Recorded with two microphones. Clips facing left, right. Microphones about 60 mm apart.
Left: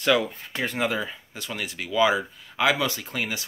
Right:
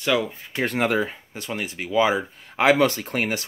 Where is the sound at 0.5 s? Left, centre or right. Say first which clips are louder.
Right 4 dB; right.